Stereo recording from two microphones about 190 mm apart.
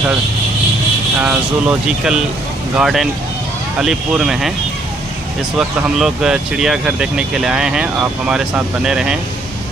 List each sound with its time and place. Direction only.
1.2 s speech: 5° right (ahead or behind)
5.6 s speech: centre (ahead or behind)